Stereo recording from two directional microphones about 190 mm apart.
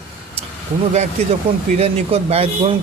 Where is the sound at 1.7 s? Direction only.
35° right (ahead or behind).